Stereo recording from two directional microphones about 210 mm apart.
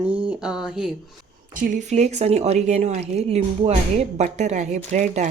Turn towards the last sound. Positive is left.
turn(degrees=-35)  # may be behind; listen again after turning